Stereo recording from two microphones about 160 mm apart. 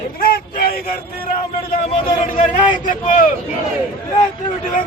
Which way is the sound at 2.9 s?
55° left (ahead or behind).